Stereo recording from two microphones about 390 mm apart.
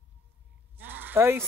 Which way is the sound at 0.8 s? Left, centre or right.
Centre.